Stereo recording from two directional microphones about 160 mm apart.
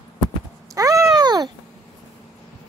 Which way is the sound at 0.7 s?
20° right (ahead or behind).